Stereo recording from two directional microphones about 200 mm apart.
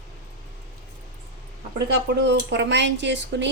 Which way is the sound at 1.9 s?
60° right (ahead or behind).